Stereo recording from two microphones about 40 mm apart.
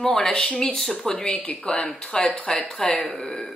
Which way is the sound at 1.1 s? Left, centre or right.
Left.